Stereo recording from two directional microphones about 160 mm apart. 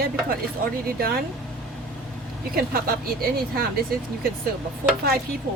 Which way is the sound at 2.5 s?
70° right (ahead or behind).